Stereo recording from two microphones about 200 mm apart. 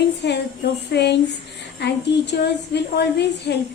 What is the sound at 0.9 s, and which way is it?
A woman's voice, 55° left (ahead or behind).